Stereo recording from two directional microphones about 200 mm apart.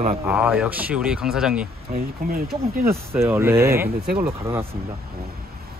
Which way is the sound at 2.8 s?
10° right (ahead or behind).